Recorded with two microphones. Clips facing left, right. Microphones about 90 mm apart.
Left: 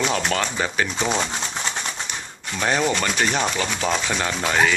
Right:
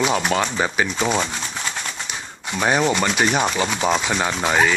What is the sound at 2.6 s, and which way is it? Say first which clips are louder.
Speech: right 3 dB; 15° right (ahead or behind).